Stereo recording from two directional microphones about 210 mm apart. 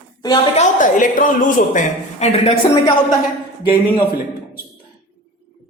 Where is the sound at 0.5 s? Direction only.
40° left (ahead or behind).